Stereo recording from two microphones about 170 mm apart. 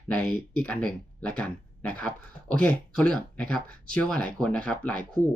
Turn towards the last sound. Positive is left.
turn(degrees=5)  # may be behind; listen again after turning